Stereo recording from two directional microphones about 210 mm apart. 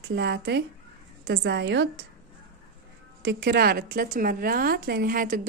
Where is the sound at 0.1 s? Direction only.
55° right (ahead or behind).